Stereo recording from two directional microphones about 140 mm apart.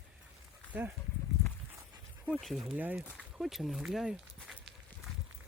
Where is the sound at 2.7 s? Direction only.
10° right (ahead or behind).